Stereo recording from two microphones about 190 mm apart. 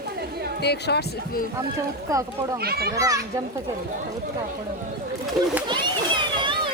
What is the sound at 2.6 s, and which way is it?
Speech, 55° right (ahead or behind).